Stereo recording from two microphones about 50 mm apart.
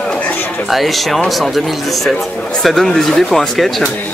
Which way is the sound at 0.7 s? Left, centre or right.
Centre.